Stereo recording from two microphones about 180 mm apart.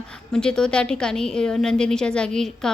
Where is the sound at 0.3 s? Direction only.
5° left (ahead or behind).